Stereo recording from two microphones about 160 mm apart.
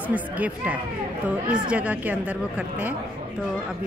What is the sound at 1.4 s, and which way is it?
Speech, 10° right (ahead or behind).